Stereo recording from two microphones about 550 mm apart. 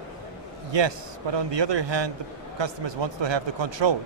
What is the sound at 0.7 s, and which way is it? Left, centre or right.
A man's voice, right.